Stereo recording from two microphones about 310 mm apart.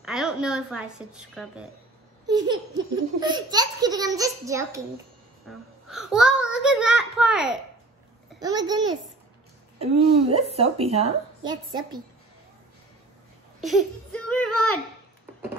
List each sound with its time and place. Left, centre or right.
0.0 s a woman's voice: centre
2.2 s a child's voice: centre
13.6 s a sound: centre